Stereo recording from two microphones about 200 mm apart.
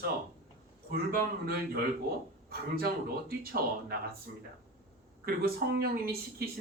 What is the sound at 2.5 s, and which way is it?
Speech, 50° right (ahead or behind).